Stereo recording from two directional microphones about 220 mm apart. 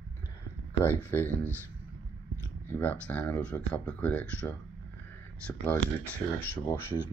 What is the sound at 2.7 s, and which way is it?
Speech, 10° left (ahead or behind).